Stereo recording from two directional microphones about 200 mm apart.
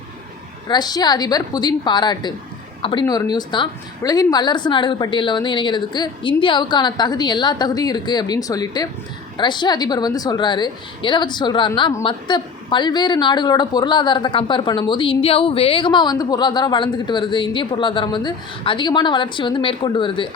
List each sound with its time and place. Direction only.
0.7 s a woman's voice: 20° left (ahead or behind)